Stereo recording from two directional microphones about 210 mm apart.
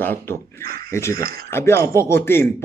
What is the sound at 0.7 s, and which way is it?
Speech, 45° right (ahead or behind).